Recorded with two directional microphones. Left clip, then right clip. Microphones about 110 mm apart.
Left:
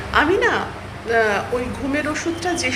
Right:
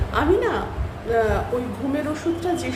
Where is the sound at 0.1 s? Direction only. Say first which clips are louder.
Left 4 dB; 20° right (ahead or behind).